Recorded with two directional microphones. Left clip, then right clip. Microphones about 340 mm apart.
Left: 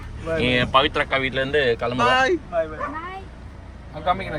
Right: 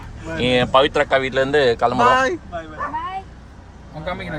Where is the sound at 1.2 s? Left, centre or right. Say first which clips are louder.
Right 4 dB; right.